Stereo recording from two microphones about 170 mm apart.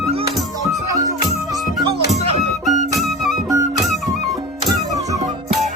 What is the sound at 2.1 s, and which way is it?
Music, 40° right (ahead or behind).